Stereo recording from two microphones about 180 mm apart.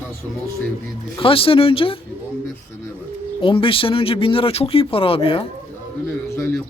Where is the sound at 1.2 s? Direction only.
30° left (ahead or behind).